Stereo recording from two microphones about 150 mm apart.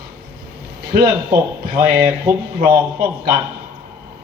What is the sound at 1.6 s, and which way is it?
Speech, 90° right.